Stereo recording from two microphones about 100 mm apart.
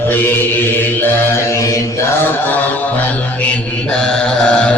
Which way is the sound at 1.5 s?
30° left (ahead or behind).